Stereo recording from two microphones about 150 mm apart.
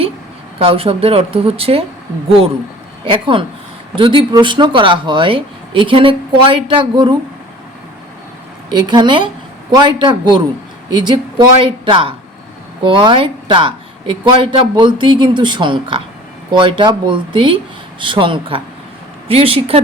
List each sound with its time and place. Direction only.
0.6 s speech: 40° right (ahead or behind)
3.1 s speech: 35° right (ahead or behind)
8.7 s speech: 30° right (ahead or behind)